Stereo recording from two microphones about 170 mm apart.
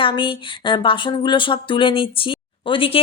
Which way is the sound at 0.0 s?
30° left (ahead or behind).